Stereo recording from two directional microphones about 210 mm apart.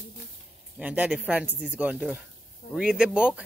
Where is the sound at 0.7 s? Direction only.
5° right (ahead or behind).